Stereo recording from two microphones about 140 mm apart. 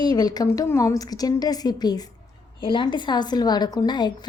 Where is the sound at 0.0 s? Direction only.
30° left (ahead or behind).